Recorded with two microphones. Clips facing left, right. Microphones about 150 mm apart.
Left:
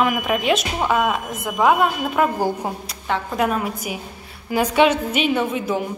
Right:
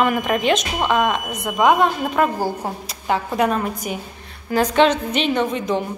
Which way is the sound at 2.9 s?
Centre (ahead or behind).